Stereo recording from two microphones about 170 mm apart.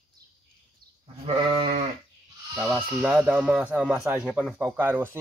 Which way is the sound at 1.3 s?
35° right (ahead or behind).